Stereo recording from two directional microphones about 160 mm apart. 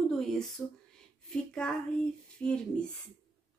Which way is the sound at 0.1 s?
5° left (ahead or behind).